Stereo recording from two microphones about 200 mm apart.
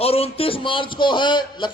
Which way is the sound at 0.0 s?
30° left (ahead or behind).